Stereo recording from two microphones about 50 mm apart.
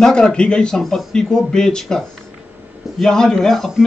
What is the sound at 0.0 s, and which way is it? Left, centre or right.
Speech, centre.